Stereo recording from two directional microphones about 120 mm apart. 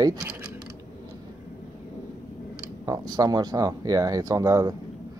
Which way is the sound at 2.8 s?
30° right (ahead or behind).